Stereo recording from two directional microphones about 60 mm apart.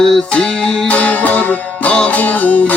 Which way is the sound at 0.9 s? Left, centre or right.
Left.